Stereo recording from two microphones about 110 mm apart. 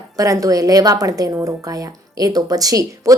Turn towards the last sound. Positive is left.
turn(degrees=-30)  # may be behind; listen again after turning